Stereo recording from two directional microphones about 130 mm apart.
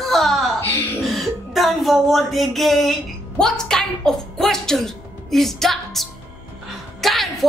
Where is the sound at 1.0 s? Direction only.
Centre (ahead or behind).